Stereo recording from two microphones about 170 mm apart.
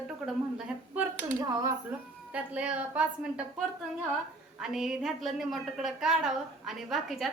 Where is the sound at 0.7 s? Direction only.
5° right (ahead or behind).